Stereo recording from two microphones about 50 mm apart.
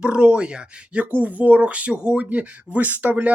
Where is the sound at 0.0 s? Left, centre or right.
Centre.